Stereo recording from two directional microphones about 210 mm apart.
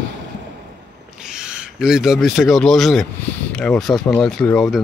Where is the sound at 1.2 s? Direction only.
5° right (ahead or behind).